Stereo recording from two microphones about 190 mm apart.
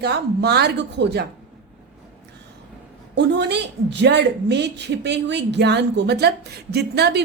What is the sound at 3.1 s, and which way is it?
A woman's voice, 65° right (ahead or behind).